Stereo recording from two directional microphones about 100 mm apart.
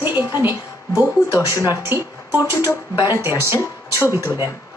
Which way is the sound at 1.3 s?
35° left (ahead or behind).